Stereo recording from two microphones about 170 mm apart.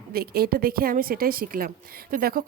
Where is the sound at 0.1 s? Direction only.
65° right (ahead or behind).